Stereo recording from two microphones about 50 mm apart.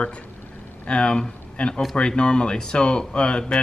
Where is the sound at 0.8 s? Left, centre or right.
Centre.